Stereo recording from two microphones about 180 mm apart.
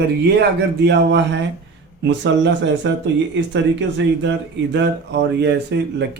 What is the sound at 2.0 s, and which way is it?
Speech, 80° right.